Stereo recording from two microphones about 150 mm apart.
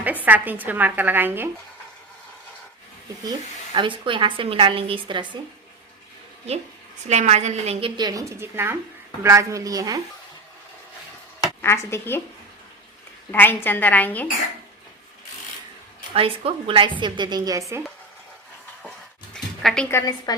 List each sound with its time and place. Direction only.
0.0 s a woman's voice: 10° right (ahead or behind)
3.8 s a woman's voice: 35° right (ahead or behind)
7.1 s a woman's voice: 50° right (ahead or behind); by 10.0 s 25° right (ahead or behind)
11.6 s a woman's voice: 15° left (ahead or behind)
13.3 s a woman's voice: 15° left (ahead or behind)
16.1 s a woman's voice: 40° right (ahead or behind)
19.3 s a sound: 5° left (ahead or behind)
19.9 s a woman's voice: 25° left (ahead or behind)